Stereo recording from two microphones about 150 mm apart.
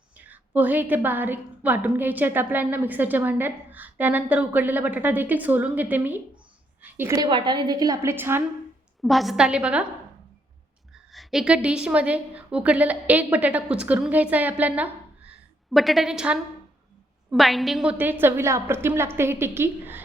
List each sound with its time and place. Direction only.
0.3 s a woman's voice: 10° right (ahead or behind)
7.2 s a woman's voice: 30° right (ahead or behind); by 8.4 s 15° right (ahead or behind)
9.0 s a woman's voice: centre (ahead or behind)
11.1 s a woman's voice: centre (ahead or behind)